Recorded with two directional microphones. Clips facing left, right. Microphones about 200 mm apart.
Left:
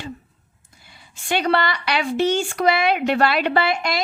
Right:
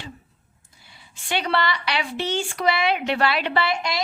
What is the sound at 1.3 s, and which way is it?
Speech, 45° left (ahead or behind).